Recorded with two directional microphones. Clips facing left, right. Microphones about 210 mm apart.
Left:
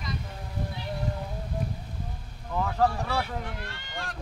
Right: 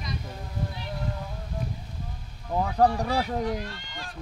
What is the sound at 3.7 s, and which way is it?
Speech, 60° left (ahead or behind).